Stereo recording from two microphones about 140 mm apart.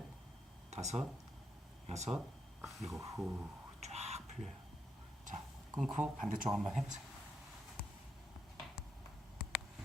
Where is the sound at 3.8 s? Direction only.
50° right (ahead or behind).